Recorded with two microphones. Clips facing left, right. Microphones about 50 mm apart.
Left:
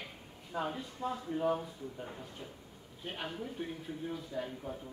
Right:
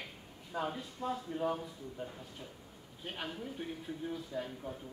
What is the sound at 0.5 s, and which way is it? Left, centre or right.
Speech, centre.